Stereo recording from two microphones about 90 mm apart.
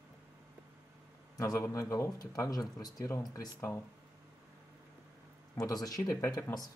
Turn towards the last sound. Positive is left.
turn(degrees=35)  # may be behind; listen again after turning